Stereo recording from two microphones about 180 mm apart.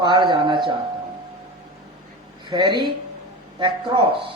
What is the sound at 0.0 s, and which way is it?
Speech, 25° right (ahead or behind).